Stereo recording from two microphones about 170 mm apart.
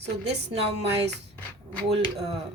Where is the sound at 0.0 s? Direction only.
35° right (ahead or behind).